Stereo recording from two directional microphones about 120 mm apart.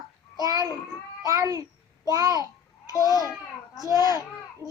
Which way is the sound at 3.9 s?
30° right (ahead or behind).